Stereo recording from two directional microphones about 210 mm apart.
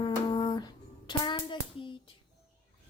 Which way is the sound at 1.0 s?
20° left (ahead or behind).